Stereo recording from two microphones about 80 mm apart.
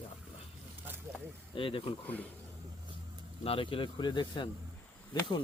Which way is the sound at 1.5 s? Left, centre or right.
Left.